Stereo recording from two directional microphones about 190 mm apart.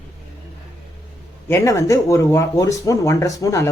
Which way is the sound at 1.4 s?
15° left (ahead or behind).